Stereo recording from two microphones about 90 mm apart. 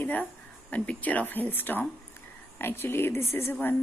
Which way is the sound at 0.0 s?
20° left (ahead or behind).